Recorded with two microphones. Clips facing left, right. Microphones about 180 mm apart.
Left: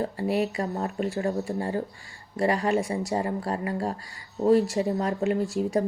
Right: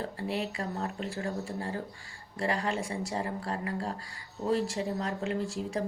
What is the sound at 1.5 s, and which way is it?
Speech, 35° left (ahead or behind).